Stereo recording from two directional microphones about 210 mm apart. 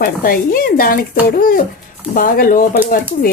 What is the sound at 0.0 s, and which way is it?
Speech, 45° left (ahead or behind).